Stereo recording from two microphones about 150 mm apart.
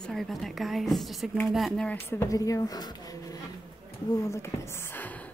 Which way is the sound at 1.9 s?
15° left (ahead or behind).